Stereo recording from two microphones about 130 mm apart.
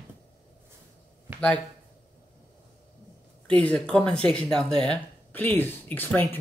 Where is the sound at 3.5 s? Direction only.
10° left (ahead or behind).